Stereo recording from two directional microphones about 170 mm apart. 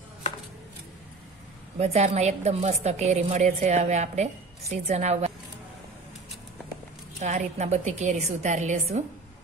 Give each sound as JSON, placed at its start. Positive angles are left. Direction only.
{"t": 1.8, "sound": "a woman's voice", "side_deg": -40}
{"t": 7.2, "sound": "a woman's voice", "side_deg": -45}